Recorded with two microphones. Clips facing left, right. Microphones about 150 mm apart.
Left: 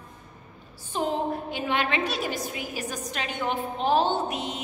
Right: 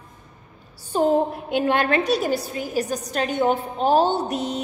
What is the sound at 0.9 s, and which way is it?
A woman's voice, 40° right (ahead or behind).